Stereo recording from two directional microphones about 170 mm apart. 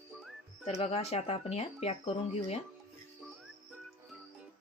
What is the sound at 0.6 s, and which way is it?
Speech, 35° left (ahead or behind).